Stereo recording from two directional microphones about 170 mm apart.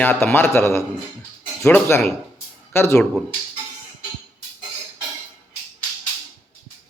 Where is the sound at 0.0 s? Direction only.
10° left (ahead or behind).